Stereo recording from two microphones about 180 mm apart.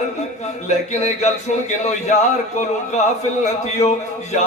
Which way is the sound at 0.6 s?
40° left (ahead or behind).